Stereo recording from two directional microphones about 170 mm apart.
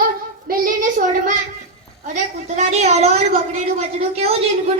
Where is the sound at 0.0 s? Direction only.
55° right (ahead or behind).